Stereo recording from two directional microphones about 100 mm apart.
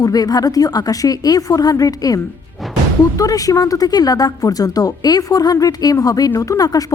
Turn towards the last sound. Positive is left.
turn(degrees=40)  # may be behind; listen again after turning